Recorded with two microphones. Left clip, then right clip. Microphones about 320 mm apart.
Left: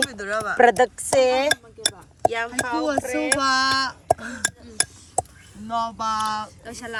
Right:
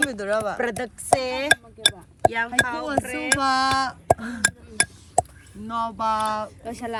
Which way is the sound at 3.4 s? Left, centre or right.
Centre.